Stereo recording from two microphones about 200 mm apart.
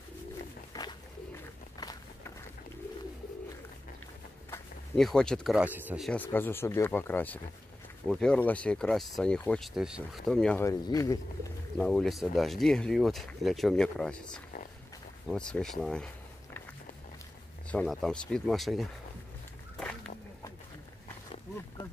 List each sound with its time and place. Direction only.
0.7 s bird: 15° left (ahead or behind)
1.8 s walk: 20° left (ahead or behind)
4.5 s speech: 5° left (ahead or behind)
6.0 s speech: 10° left (ahead or behind)
10.6 s speech: 15° left (ahead or behind)
11.8 s speech: centre (ahead or behind)
15.2 s speech: 5° left (ahead or behind)
17.6 s speech: 5° left (ahead or behind)